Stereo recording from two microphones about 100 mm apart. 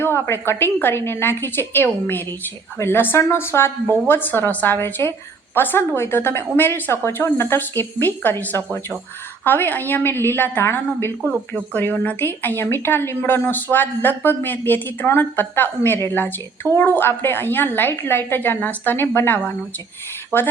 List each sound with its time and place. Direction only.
0.0 s a woman's voice: 25° left (ahead or behind)